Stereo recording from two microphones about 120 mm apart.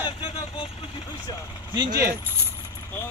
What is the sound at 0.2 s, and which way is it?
Vehicle, 45° left (ahead or behind).